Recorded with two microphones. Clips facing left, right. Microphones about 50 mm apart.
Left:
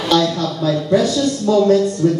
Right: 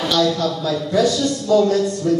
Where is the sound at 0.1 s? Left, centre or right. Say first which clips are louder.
Left 3 dB; left.